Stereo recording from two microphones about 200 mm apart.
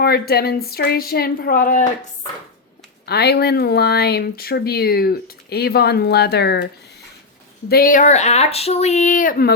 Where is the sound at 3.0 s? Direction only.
55° left (ahead or behind).